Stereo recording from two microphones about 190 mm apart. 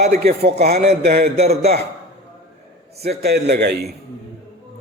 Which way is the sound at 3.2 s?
60° right (ahead or behind).